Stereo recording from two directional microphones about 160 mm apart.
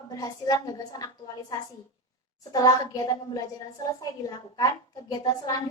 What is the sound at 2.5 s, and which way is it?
Speech, 25° left (ahead or behind).